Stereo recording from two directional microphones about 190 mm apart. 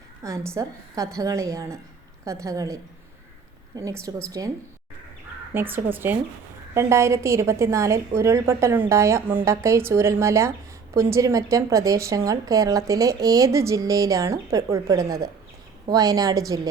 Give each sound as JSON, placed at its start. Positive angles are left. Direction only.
{"t": 0.2, "sound": "a woman's voice", "side_deg": -15}
{"t": 5.5, "sound": "a woman's voice", "side_deg": -10}